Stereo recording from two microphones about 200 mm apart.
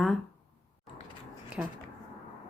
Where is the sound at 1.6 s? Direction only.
10° right (ahead or behind).